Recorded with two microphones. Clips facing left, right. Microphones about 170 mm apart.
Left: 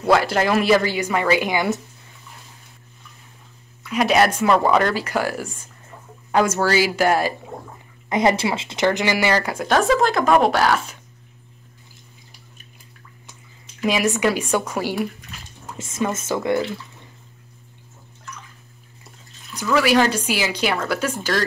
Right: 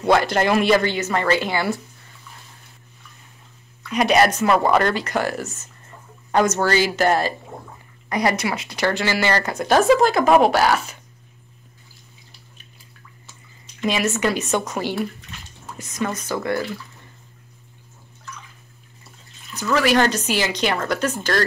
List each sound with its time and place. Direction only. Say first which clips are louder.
0.0 s speech: even; 5° left (ahead or behind)
3.9 s speech: even; centre (ahead or behind)
8.1 s speech: left 3 dB; 20° left (ahead or behind); by 11.0 s centre (ahead or behind)
13.7 s speech: left 2 dB; 5° left (ahead or behind)
16.0 s speech: left 2 dB; 25° left (ahead or behind)
19.6 s speech: left 1 dB; 10° left (ahead or behind)